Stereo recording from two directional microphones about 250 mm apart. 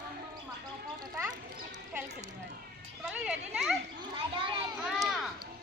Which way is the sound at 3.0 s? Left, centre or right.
Centre.